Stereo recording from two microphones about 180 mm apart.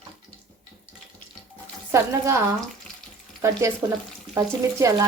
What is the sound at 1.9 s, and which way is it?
Speech, 15° right (ahead or behind).